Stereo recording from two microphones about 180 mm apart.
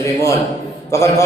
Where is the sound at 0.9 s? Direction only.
15° left (ahead or behind).